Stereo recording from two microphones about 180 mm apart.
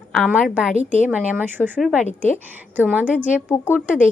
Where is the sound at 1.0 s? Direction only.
5° right (ahead or behind).